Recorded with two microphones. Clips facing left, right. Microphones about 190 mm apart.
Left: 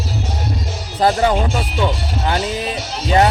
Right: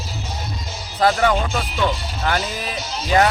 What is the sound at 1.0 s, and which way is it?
Speech, 30° left (ahead or behind).